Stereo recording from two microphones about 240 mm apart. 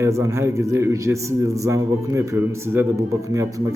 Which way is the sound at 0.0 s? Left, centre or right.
Centre.